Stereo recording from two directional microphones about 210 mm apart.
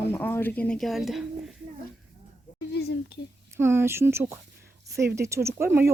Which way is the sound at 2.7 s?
50° left (ahead or behind).